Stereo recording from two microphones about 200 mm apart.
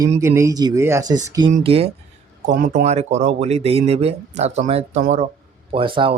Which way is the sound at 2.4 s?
40° right (ahead or behind).